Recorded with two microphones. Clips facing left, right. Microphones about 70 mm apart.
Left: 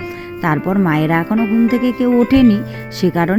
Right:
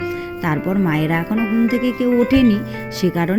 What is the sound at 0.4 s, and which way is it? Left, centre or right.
Speech, left.